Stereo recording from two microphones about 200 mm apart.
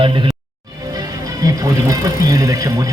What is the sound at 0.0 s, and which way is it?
Speech, 25° right (ahead or behind).